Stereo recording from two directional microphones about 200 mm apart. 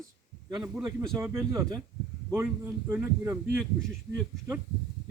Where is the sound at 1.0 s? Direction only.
15° right (ahead or behind).